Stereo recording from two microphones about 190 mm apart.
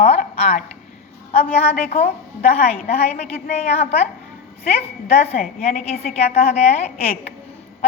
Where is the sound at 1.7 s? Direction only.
35° left (ahead or behind).